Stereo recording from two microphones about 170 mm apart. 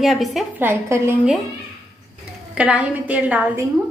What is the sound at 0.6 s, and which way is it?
Speech, 15° right (ahead or behind).